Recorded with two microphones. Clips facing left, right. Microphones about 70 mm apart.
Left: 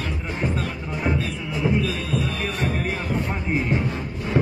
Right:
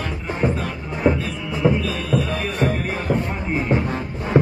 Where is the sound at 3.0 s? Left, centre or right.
Right.